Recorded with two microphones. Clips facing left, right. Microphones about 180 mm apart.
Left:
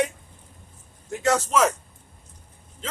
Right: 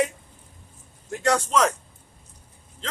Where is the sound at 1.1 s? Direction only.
Centre (ahead or behind).